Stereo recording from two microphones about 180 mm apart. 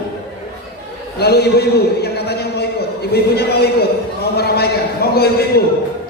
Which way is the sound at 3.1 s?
65° left (ahead or behind).